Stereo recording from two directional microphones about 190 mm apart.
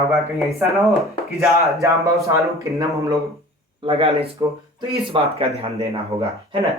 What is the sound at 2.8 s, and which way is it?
Speech, 20° right (ahead or behind).